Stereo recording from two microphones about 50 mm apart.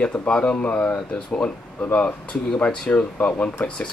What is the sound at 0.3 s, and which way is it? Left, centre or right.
Speech, centre.